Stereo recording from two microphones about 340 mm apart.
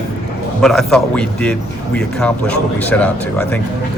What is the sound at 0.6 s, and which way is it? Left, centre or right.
Speech, centre.